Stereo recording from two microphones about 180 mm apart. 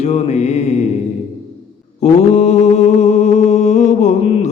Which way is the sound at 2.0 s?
40° left (ahead or behind).